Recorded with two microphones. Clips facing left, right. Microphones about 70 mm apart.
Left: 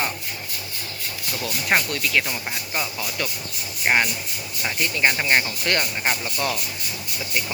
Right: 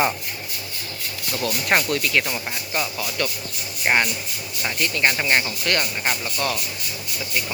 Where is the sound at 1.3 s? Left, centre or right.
Centre.